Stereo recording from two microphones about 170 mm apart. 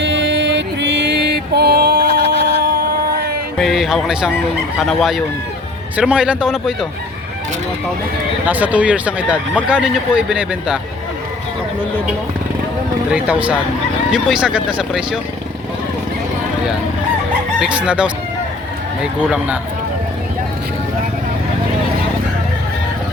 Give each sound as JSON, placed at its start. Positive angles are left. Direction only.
{"t": 0.0, "sound": "music", "side_deg": -90}
{"t": 3.6, "sound": "a man's voice", "side_deg": 0}
{"t": 8.4, "sound": "a man's voice", "side_deg": -10}
{"t": 13.1, "sound": "a man's voice", "side_deg": -5}
{"t": 17.6, "sound": "speech", "side_deg": -5}